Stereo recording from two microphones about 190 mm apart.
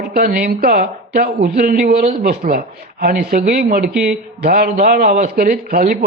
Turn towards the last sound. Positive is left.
turn(degrees=-45)  # may be behind; listen again after turning